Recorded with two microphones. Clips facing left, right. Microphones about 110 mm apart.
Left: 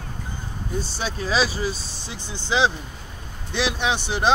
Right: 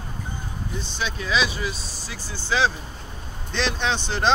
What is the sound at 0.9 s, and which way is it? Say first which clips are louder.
Speech: left 1 dB; 35° left (ahead or behind).